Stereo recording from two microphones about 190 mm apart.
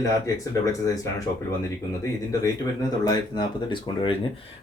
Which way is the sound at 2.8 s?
20° left (ahead or behind).